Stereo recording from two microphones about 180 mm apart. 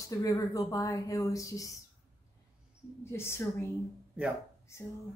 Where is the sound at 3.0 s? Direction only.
15° left (ahead or behind).